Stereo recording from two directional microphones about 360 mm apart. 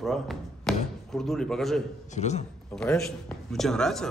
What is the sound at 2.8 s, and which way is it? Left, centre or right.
Speech, centre.